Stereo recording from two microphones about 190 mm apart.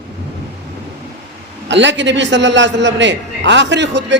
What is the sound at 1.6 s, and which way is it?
A man's voice, 70° right (ahead or behind).